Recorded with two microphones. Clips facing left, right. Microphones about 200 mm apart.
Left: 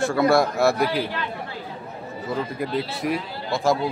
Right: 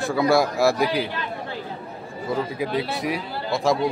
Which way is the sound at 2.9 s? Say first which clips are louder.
Left 1 dB; centre (ahead or behind).